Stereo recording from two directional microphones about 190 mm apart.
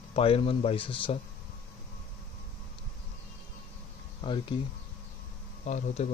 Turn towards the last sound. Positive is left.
turn(degrees=40)  # may be behind; listen again after turning